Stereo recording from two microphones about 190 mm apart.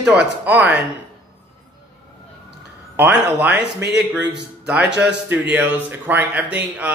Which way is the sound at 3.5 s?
60° right (ahead or behind).